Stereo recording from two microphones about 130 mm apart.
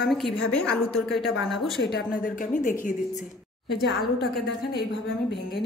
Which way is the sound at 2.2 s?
90° left.